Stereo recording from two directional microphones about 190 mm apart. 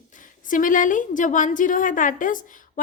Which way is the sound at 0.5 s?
45° left (ahead or behind).